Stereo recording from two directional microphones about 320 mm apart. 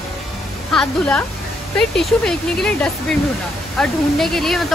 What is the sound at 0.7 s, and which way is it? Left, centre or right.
Speech, centre.